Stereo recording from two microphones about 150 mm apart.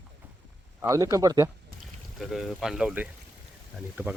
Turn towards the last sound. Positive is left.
turn(degrees=-10)  # may be behind; listen again after turning